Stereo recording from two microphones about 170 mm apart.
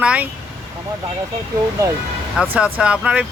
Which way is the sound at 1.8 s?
20° right (ahead or behind).